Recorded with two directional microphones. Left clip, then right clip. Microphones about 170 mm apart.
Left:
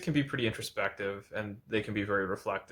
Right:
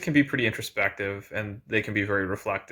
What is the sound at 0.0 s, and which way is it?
Speech, 20° right (ahead or behind).